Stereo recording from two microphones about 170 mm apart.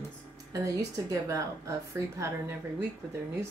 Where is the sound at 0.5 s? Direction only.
20° right (ahead or behind).